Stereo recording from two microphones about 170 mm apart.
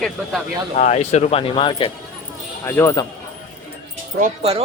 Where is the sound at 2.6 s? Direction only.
15° left (ahead or behind).